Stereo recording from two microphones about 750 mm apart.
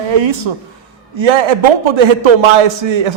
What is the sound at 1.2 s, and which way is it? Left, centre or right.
A man's voice, right.